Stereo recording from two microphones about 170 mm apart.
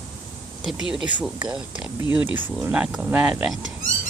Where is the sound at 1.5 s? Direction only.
5° right (ahead or behind).